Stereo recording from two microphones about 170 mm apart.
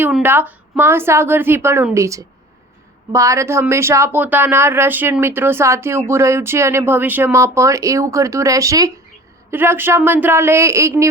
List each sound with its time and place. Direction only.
0.0 s speech: 10° right (ahead or behind)